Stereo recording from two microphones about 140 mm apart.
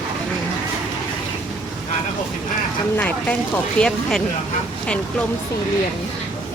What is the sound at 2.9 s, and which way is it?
Speech, 10° left (ahead or behind).